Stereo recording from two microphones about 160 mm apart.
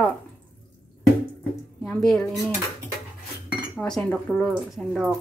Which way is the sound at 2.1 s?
Centre (ahead or behind).